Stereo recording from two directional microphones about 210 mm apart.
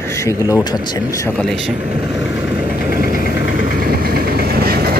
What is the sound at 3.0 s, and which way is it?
Vehicle, 40° right (ahead or behind).